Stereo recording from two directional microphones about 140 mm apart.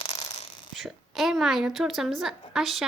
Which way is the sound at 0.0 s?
45° left (ahead or behind).